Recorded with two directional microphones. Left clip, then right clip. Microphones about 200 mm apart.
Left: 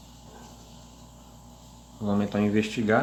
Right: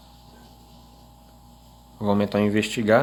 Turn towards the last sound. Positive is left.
turn(degrees=-50)  # may be behind; listen again after turning